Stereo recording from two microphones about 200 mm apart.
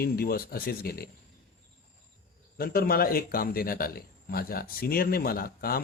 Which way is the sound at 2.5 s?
50° left (ahead or behind).